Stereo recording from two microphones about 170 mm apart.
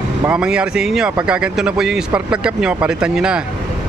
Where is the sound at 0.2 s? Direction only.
5° right (ahead or behind).